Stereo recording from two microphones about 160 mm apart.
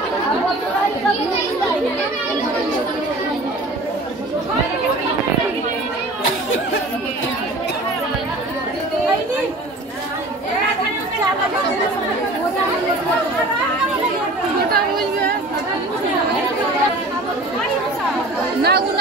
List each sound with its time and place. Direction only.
18.6 s chatter: 90° right